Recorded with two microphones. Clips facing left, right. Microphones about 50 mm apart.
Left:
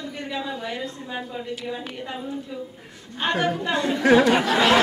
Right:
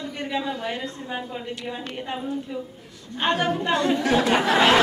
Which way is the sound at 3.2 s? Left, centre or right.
Right.